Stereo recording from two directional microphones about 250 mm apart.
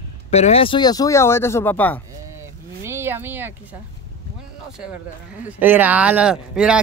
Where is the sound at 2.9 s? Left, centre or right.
Centre.